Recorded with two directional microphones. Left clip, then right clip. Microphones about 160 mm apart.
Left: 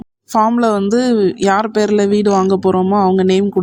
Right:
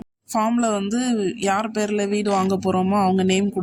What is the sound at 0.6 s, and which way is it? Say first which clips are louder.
Speech: left 9 dB; 30° left (ahead or behind).